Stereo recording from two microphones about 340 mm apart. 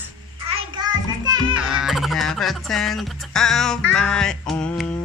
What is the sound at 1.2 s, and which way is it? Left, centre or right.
Music, centre.